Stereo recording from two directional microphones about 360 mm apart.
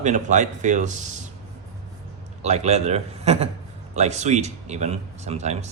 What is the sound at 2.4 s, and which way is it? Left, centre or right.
Speech, centre.